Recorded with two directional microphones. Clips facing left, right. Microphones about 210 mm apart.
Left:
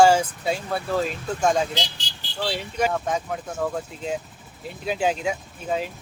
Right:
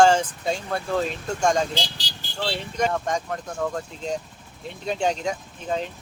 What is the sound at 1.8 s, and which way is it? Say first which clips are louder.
Vehicle: even; 35° right (ahead or behind).